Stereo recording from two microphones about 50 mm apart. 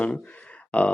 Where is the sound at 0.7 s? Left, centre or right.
Left.